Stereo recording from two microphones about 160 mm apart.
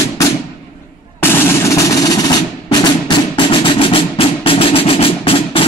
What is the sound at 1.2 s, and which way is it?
Music, 15° left (ahead or behind).